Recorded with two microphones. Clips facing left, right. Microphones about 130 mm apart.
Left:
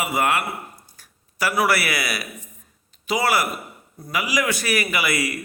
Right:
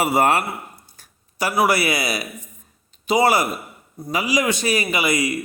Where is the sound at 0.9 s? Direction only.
25° right (ahead or behind).